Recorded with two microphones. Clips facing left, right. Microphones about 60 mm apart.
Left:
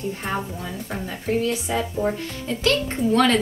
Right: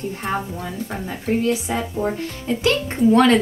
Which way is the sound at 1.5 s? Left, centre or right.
Centre.